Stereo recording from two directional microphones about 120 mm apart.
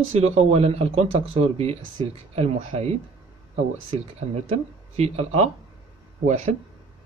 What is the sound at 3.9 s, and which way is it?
Speech, 55° right (ahead or behind).